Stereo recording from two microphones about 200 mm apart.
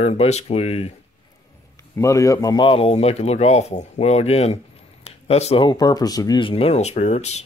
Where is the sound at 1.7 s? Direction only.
15° left (ahead or behind).